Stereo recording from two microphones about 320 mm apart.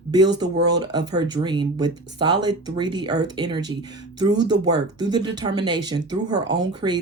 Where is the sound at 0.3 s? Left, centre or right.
Centre.